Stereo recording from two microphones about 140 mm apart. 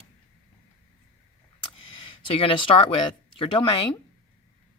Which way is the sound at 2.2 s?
40° left (ahead or behind).